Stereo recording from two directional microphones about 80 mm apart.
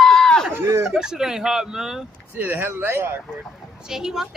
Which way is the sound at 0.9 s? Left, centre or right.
Centre.